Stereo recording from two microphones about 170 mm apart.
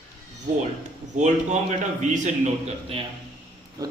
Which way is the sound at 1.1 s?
45° right (ahead or behind).